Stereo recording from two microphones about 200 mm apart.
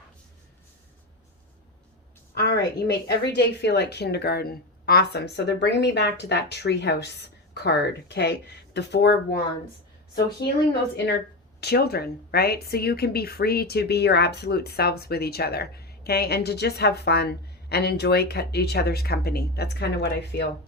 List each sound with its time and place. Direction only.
2.3 s a woman's voice: 55° left (ahead or behind)
10.9 s a woman's voice: 60° left (ahead or behind)